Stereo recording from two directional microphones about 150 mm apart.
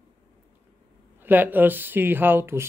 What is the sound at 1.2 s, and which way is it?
Speech, 10° right (ahead or behind).